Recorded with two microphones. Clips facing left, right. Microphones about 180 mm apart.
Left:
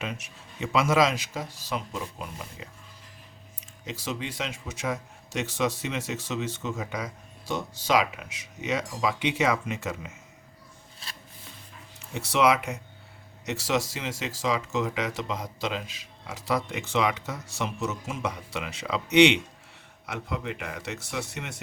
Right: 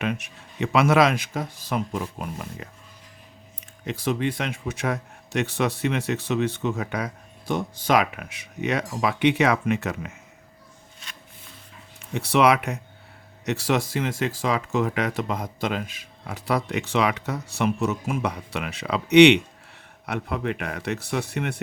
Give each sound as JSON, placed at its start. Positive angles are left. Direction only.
{"t": 0.0, "sound": "a man's voice", "side_deg": -60}
{"t": 3.8, "sound": "a man's voice", "side_deg": -55}
{"t": 11.9, "sound": "a man's voice", "side_deg": -60}